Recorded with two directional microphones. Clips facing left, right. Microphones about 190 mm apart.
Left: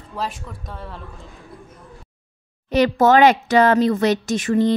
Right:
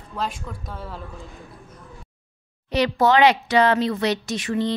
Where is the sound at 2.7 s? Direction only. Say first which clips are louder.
Left 4 dB; 50° left (ahead or behind).